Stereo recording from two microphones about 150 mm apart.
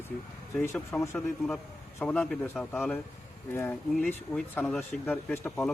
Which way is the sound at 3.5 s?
15° left (ahead or behind).